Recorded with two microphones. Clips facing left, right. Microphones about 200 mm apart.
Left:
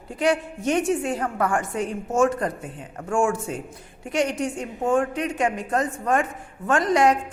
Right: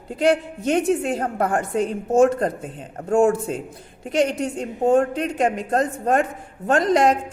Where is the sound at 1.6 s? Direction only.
60° right (ahead or behind).